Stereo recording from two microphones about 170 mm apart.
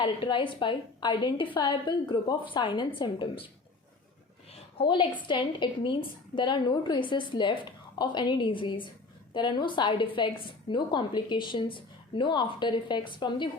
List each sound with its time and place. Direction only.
0.0 s a woman's voice: 30° left (ahead or behind)
4.8 s a woman's voice: 30° left (ahead or behind)